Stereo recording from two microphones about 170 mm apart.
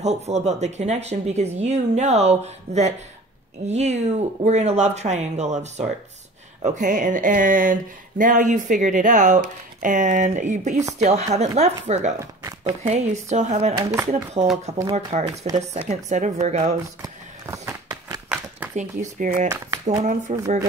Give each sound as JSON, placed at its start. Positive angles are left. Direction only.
{"t": 0.0, "sound": "speech", "side_deg": -40}
{"t": 17.0, "sound": "a sound", "side_deg": -15}
{"t": 18.8, "sound": "speech", "side_deg": -50}
{"t": 19.5, "sound": "speech", "side_deg": -20}
{"t": 20.0, "sound": "speech", "side_deg": -45}